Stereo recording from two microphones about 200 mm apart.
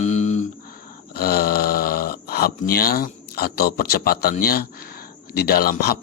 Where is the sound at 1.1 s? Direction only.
50° left (ahead or behind).